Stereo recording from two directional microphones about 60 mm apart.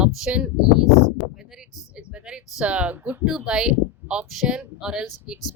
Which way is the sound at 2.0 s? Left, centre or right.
Centre.